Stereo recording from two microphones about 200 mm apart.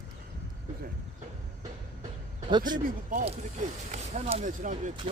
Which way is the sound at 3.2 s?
35° right (ahead or behind).